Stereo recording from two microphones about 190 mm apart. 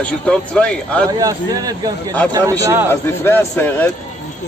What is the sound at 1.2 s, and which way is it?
A man's voice, 20° right (ahead or behind).